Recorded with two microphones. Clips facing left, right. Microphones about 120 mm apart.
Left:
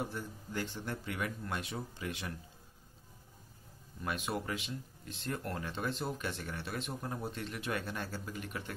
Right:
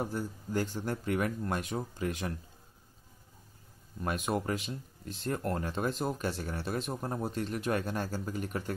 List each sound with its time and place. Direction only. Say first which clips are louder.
0.0 s speech: right 5 dB; 40° right (ahead or behind)
4.0 s speech: right 5 dB; 45° right (ahead or behind)